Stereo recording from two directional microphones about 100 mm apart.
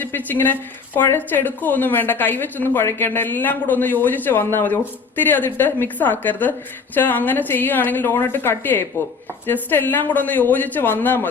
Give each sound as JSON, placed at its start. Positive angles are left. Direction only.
{"t": 0.0, "sound": "a woman's voice", "side_deg": 20}